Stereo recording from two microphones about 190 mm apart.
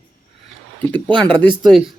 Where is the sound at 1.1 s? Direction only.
25° right (ahead or behind).